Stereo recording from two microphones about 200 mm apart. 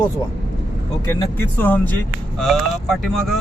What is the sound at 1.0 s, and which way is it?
Speech, 10° left (ahead or behind).